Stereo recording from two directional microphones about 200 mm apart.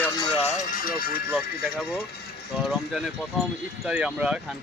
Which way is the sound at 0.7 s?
45° left (ahead or behind).